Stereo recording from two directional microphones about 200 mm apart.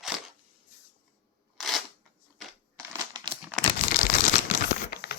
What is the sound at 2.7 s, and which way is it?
Crumpling, 20° right (ahead or behind).